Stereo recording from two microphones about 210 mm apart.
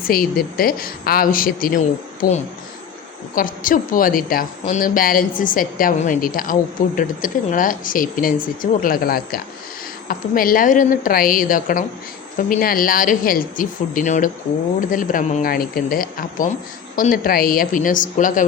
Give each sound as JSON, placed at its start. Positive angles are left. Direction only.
{"t": 0.0, "sound": "a woman's voice", "side_deg": 45}